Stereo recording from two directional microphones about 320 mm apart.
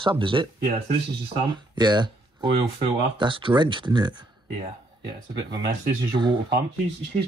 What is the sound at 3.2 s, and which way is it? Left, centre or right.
Speech, centre.